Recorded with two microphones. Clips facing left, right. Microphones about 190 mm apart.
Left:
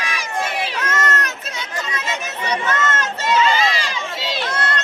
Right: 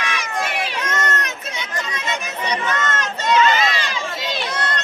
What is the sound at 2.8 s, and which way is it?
Run, 5° left (ahead or behind).